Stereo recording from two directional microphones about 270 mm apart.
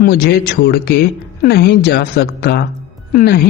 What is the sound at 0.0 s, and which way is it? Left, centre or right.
A woman's voice, left.